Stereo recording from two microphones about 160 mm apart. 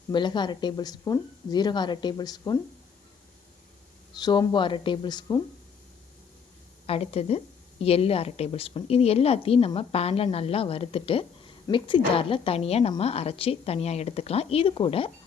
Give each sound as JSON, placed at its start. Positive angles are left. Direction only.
{"t": 0.1, "sound": "speech", "side_deg": 30}
{"t": 4.2, "sound": "speech", "side_deg": 25}
{"t": 6.8, "sound": "a woman's voice", "side_deg": 40}